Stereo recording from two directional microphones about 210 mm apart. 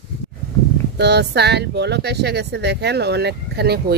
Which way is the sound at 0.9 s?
50° right (ahead or behind).